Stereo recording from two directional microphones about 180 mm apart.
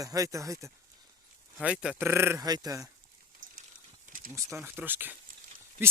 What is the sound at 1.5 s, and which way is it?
Speech, 5° right (ahead or behind).